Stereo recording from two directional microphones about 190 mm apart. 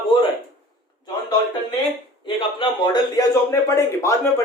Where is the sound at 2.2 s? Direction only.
25° left (ahead or behind).